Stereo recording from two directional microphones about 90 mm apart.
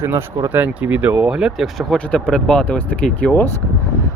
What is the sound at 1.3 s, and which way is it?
Speech, 5° right (ahead or behind).